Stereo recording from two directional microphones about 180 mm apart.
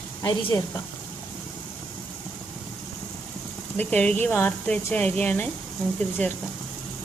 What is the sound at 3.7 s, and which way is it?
Speech, 10° left (ahead or behind).